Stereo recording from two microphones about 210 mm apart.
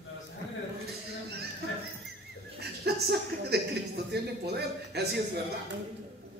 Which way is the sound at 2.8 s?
50° right (ahead or behind).